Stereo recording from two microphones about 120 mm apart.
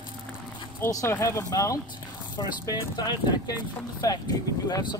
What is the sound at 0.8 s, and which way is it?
Speech, 25° left (ahead or behind).